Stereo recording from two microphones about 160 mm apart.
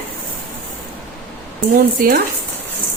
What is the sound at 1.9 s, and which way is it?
Speech, 65° right (ahead or behind).